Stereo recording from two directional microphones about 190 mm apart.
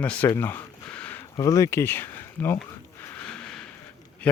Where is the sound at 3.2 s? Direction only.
5° left (ahead or behind).